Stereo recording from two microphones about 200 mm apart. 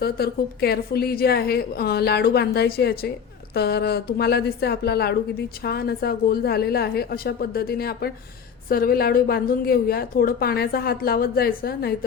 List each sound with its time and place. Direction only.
0.0 s a woman's voice: 50° left (ahead or behind)